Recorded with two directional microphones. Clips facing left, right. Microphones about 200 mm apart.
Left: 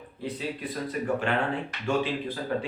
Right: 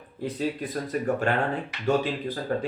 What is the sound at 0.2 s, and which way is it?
Speech, 45° right (ahead or behind).